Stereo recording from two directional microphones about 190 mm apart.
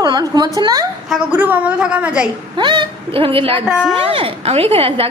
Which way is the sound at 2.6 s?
25° right (ahead or behind).